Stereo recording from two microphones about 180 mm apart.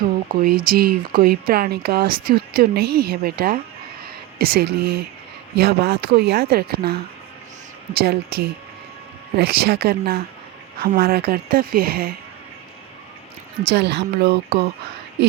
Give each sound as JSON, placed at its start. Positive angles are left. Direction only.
{"t": 0.3, "sound": "speech", "side_deg": -55}
{"t": 13.7, "sound": "speech", "side_deg": -65}